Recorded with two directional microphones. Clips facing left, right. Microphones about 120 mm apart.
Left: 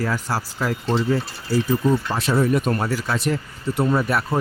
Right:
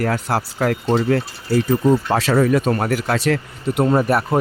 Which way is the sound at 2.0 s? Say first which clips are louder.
Right 4 dB; 90° right.